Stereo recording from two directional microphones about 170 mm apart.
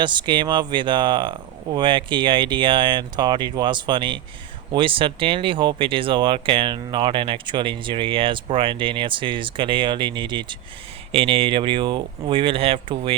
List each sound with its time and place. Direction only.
0.0 s speech: 25° right (ahead or behind)